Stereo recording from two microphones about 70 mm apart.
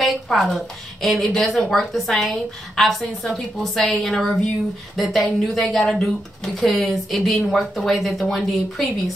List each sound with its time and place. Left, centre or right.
0.0 s a woman's voice: centre